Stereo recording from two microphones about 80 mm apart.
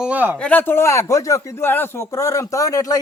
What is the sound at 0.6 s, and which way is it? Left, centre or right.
Speech, left.